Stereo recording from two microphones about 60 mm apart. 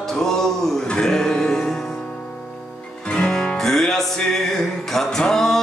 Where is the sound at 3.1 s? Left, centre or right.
Centre.